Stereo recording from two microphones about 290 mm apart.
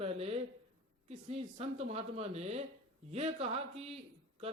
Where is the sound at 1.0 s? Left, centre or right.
Right.